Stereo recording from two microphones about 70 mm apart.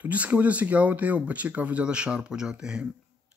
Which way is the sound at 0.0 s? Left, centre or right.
Right.